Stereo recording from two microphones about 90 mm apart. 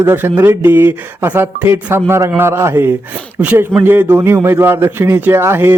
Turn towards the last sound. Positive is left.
turn(degrees=-25)  # may be behind; listen again after turning